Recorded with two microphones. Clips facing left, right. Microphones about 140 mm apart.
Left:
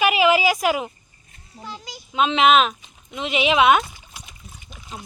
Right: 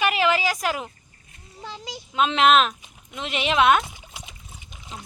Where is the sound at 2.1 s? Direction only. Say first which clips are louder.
Left 2 dB; centre (ahead or behind).